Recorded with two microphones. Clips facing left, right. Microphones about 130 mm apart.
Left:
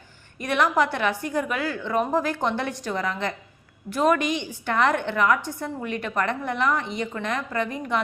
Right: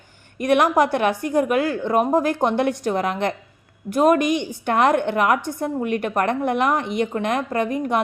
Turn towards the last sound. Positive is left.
turn(degrees=-50)  # may be behind; listen again after turning